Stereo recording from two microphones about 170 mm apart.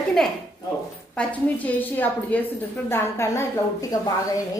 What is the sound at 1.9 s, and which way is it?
A woman's voice, 10° left (ahead or behind).